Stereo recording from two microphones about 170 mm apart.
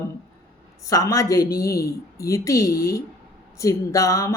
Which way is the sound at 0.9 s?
20° left (ahead or behind).